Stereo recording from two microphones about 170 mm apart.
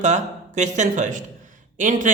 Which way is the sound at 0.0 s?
45° right (ahead or behind).